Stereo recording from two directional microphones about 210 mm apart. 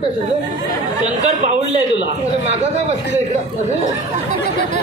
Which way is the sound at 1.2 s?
30° right (ahead or behind).